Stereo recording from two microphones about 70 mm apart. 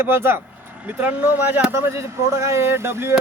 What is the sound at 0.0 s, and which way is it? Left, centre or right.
Speech, right.